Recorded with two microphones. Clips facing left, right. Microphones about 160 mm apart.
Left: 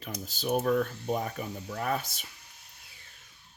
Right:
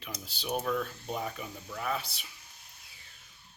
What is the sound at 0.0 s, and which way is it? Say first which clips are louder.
Speech: left 6 dB; 45° left (ahead or behind).